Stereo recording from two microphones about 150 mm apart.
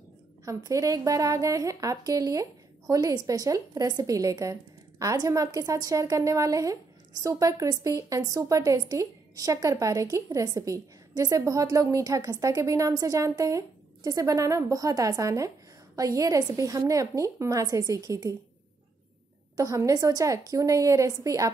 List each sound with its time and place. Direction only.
0.5 s a woman's voice: 20° right (ahead or behind)
19.5 s a woman's voice: 20° right (ahead or behind)